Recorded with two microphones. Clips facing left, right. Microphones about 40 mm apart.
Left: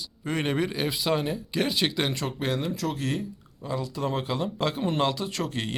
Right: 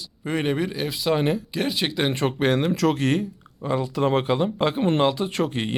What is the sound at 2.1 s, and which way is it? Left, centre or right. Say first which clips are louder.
Speech: right 7 dB; right.